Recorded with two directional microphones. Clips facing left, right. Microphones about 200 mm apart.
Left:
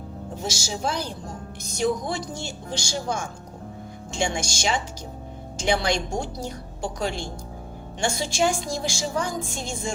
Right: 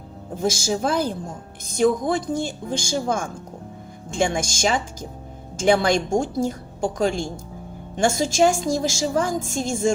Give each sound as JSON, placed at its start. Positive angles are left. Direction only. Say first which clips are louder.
{"t": 0.4, "sound": "a woman's voice", "louder": "right 7 dB", "side_deg": -50}